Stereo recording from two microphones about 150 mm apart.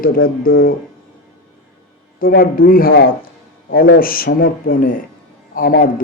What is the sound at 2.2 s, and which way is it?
Speech, 75° left (ahead or behind).